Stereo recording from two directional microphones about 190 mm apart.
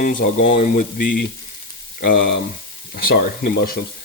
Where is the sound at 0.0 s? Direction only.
45° left (ahead or behind).